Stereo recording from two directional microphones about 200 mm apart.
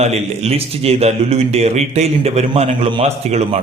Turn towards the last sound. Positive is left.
turn(degrees=-30)  # may be behind; listen again after turning